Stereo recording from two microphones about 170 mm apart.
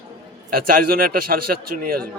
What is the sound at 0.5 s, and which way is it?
A man's voice, 60° right (ahead or behind).